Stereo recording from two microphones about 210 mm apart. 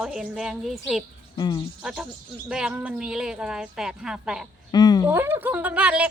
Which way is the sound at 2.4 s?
5° right (ahead or behind).